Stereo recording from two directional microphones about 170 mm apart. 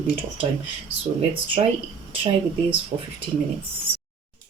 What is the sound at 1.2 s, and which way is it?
Speech, 35° right (ahead or behind).